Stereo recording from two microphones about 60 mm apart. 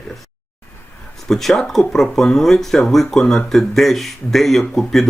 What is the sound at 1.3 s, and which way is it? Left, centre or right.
Speech, centre.